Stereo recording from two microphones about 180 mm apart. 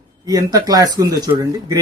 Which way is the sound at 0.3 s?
20° right (ahead or behind).